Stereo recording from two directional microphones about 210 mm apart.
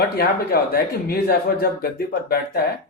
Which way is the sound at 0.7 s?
45° left (ahead or behind).